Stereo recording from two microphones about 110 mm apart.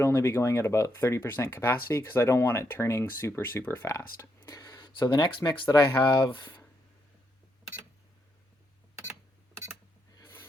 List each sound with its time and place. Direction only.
0.0 s speech: 25° left (ahead or behind); by 6.6 s 45° left (ahead or behind)